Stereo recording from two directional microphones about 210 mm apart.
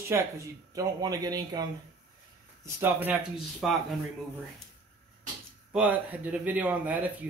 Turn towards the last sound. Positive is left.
turn(degrees=-10)  # may be behind; listen again after turning